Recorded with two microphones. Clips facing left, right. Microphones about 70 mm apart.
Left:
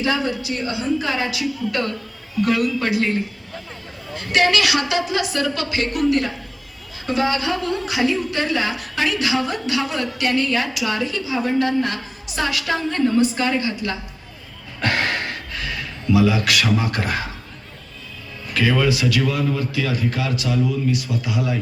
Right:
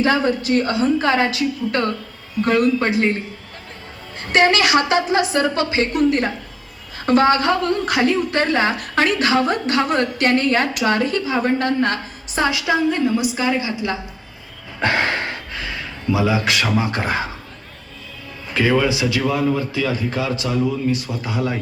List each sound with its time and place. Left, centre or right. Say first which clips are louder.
0.0 s a woman's voice: right 4 dB; right
4.1 s a woman's voice: right 2 dB; right
7.0 s a woman's voice: right 6 dB; right
12.3 s a woman's voice: right 4 dB; right
18.5 s a man's voice: right 2 dB; right